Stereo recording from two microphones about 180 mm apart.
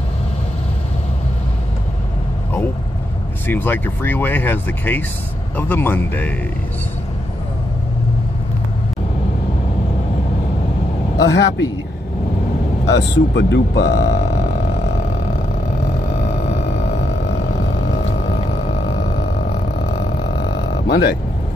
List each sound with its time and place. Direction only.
3.4 s speech: 10° left (ahead or behind)
11.1 s speech: 75° left (ahead or behind)
12.8 s speech: 80° left
20.8 s speech: 65° left (ahead or behind)